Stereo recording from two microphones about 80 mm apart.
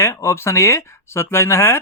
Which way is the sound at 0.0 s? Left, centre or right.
Left.